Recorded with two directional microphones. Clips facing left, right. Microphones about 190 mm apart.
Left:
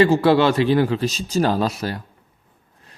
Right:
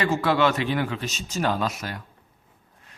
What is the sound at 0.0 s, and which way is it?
Speech, 30° left (ahead or behind).